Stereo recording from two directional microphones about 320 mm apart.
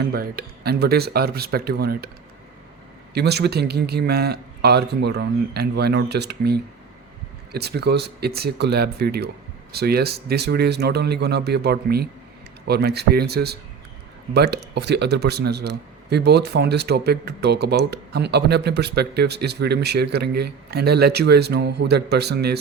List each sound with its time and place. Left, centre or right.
0.0 s speech: right
3.2 s speech: right